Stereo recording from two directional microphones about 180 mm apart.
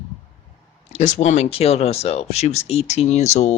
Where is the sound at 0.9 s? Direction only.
40° left (ahead or behind).